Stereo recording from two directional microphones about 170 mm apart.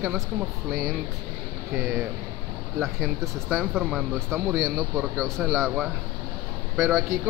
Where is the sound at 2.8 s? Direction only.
5° left (ahead or behind).